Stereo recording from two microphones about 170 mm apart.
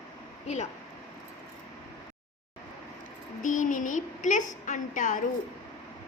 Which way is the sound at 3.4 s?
50° left (ahead or behind).